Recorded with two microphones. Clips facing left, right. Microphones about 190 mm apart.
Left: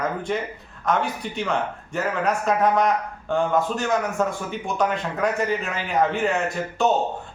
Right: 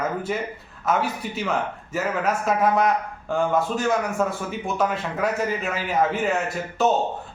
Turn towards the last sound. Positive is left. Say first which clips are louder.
# even
turn(degrees=0)  # may be behind; listen again after turning